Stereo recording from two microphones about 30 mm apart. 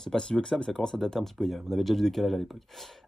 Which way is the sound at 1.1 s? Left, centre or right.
Centre.